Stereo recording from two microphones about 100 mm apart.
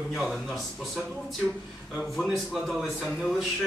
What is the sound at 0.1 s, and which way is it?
Speech, centre (ahead or behind).